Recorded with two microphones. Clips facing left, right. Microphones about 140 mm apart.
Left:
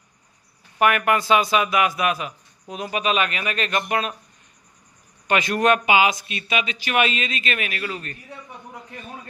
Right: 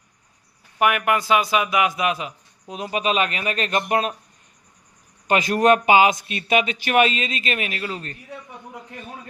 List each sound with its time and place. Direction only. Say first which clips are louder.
0.8 s speech: left 1 dB; 15° right (ahead or behind); by 4.1 s 35° right (ahead or behind)
5.3 s a man's voice: right 2 dB; 35° right (ahead or behind); by 7.0 s 50° right (ahead or behind)
7.0 s a man's voice: right 3 dB; 35° right (ahead or behind)